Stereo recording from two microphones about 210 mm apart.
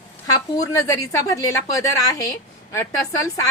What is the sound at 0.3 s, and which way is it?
A woman's voice, 15° left (ahead or behind).